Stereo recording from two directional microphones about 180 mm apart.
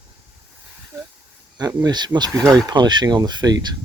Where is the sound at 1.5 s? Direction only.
20° right (ahead or behind).